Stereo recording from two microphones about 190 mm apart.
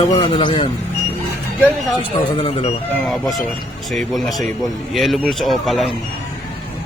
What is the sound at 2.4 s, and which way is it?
Speech, 35° left (ahead or behind).